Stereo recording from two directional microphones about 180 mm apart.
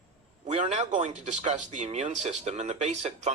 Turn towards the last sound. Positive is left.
turn(degrees=-35)  # may be behind; listen again after turning